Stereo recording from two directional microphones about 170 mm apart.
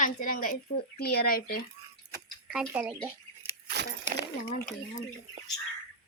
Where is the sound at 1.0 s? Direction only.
65° left (ahead or behind).